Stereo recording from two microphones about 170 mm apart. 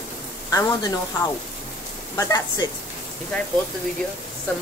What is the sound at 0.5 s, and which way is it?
Speech, 15° left (ahead or behind).